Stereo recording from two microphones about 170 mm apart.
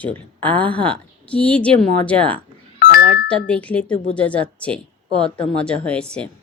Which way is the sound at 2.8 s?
60° left (ahead or behind).